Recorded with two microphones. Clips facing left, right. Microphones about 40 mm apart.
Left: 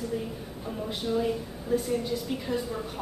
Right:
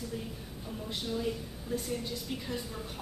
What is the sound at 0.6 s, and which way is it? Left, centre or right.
Speech, left.